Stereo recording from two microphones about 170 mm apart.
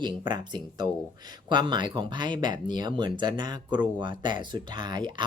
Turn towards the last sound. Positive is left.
turn(degrees=-25)  # may be behind; listen again after turning